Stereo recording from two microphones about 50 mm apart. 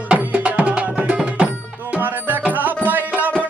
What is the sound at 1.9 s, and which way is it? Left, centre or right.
Music, right.